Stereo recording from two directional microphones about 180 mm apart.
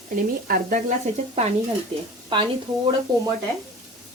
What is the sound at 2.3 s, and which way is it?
Speech, 30° right (ahead or behind).